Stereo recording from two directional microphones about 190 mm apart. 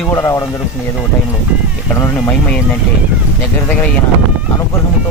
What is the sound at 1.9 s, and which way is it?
Speech, 15° left (ahead or behind).